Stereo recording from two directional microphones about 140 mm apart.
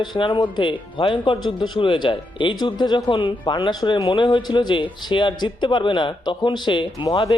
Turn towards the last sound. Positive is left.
turn(degrees=35)  # may be behind; listen again after turning